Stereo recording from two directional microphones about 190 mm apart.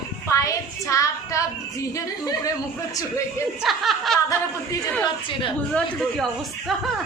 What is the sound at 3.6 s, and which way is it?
Speech, centre (ahead or behind).